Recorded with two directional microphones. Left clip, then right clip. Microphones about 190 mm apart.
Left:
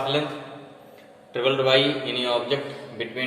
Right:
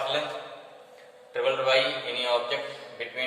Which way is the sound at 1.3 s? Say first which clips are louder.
Left 4 dB; 25° left (ahead or behind).